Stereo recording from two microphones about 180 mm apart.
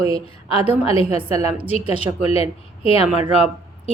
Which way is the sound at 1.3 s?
35° left (ahead or behind).